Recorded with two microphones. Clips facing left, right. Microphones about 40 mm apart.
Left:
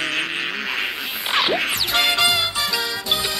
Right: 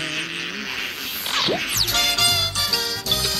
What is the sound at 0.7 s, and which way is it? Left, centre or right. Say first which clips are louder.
Music: left 4 dB; centre.